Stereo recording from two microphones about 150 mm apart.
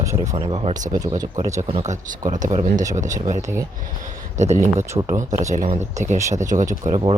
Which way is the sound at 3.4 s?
20° right (ahead or behind).